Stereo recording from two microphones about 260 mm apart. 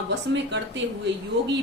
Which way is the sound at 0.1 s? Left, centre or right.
Right.